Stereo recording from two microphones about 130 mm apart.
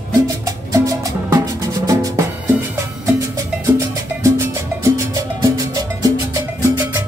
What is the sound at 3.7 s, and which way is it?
Music, 20° right (ahead or behind).